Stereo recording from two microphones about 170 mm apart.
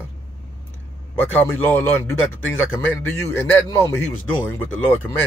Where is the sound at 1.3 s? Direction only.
10° left (ahead or behind).